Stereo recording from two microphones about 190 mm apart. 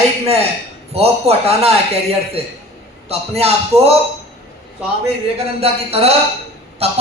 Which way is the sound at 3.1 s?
30° right (ahead or behind).